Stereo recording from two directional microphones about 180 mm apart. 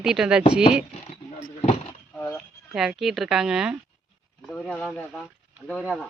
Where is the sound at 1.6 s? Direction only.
30° left (ahead or behind).